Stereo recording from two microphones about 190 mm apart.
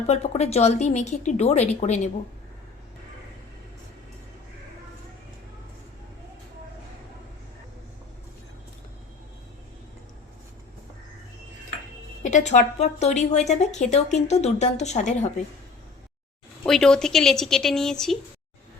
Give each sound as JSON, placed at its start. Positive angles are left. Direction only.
{"t": 0.1, "sound": "a woman's voice", "side_deg": 35}
{"t": 12.2, "sound": "a woman's voice", "side_deg": 40}
{"t": 16.6, "sound": "speech", "side_deg": 5}